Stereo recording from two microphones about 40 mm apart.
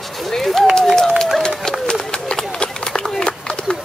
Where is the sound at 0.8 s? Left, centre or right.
Centre.